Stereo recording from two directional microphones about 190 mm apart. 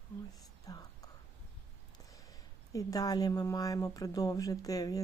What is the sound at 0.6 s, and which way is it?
Whispering, 20° left (ahead or behind).